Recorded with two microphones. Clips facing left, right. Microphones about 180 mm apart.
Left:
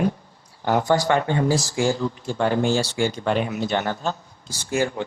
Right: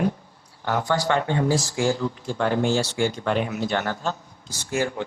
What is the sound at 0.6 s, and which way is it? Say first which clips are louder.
Speech: left 4 dB; 15° left (ahead or behind).